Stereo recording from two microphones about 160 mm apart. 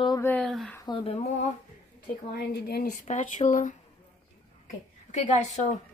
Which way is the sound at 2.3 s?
75° left (ahead or behind).